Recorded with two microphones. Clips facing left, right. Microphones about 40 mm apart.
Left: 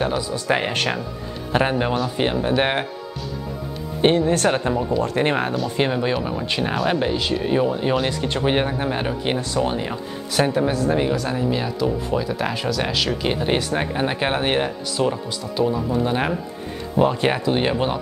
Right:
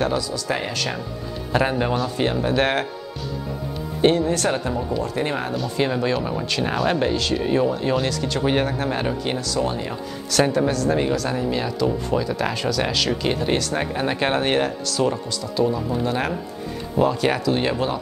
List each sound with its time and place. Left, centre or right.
0.2 s speech: left
1.5 s speech: left
4.0 s speech: left
5.9 s speech: centre
6.1 s speech: centre
9.2 s speech: left
10.4 s a woman's voice: centre
17.0 s speech: left